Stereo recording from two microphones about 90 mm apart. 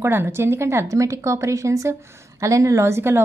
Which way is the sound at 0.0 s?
25° right (ahead or behind).